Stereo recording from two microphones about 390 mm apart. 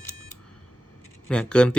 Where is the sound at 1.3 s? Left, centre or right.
Centre.